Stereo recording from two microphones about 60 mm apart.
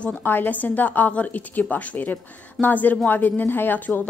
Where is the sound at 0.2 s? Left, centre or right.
Left.